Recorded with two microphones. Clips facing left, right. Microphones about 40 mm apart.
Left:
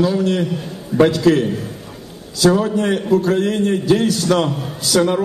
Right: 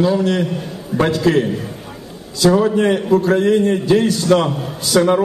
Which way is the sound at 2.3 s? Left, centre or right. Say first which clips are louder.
Right 2 dB; right.